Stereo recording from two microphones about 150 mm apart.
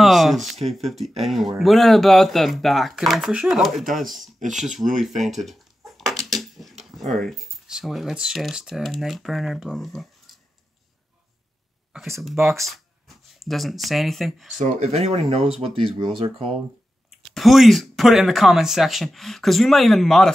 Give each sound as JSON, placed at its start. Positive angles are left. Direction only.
{"t": 0.0, "sound": "speech", "side_deg": 0}
{"t": 12.5, "sound": "speech", "side_deg": 0}
{"t": 14.6, "sound": "speech", "side_deg": -45}
{"t": 17.1, "sound": "speech", "side_deg": 0}